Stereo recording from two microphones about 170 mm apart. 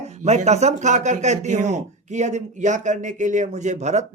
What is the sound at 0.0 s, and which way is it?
Speech, 40° right (ahead or behind).